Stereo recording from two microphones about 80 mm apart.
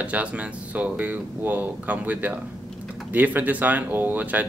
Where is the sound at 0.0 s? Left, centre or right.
Centre.